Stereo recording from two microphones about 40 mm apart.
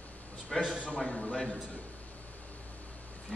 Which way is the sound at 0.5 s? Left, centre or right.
Centre.